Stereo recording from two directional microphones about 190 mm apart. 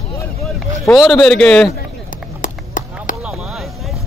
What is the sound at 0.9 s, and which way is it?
Speech, centre (ahead or behind).